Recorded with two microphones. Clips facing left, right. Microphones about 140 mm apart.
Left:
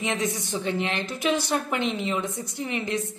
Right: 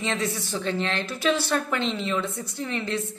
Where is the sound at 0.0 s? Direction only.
15° left (ahead or behind).